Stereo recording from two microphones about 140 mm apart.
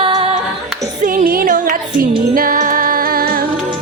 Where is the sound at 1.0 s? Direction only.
80° right.